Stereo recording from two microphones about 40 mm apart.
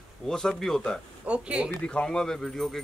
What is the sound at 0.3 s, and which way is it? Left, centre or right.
Speech, centre.